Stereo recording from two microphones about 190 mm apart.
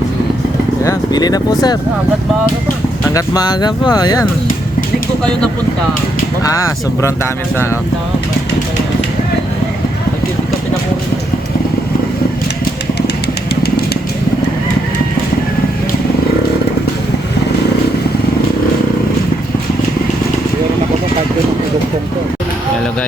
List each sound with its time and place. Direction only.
0.9 s speech: 20° left (ahead or behind)
3.2 s speech: 20° left (ahead or behind)
6.4 s speech: 15° left (ahead or behind)
13.6 s vehicle: 60° left (ahead or behind)